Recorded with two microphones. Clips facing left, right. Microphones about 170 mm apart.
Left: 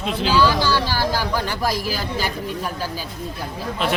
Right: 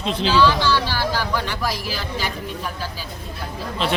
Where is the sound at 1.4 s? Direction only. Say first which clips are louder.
Left 2 dB; 45° left (ahead or behind).